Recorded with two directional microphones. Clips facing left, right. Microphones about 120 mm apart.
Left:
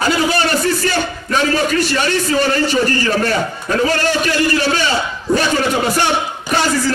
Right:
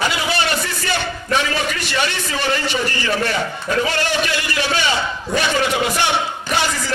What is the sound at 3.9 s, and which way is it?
Speech, 40° left (ahead or behind).